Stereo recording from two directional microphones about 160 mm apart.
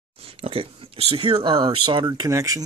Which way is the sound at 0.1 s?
35° right (ahead or behind).